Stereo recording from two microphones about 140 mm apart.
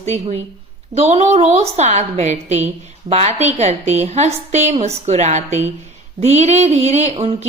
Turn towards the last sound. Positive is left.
turn(degrees=-50)  # may be behind; listen again after turning